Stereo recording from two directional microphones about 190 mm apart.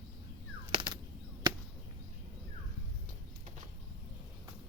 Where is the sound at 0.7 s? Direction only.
25° right (ahead or behind).